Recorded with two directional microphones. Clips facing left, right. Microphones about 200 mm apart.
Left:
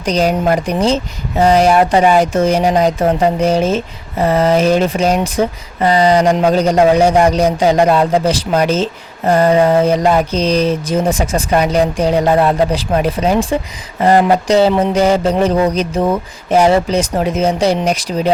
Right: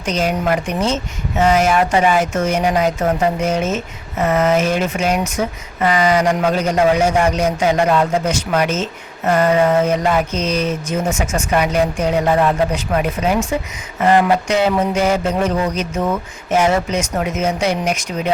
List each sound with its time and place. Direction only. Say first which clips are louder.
0.0 s speech: left 5 dB; 35° left (ahead or behind)